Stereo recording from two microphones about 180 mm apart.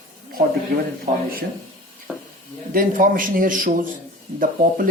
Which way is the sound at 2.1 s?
5° right (ahead or behind).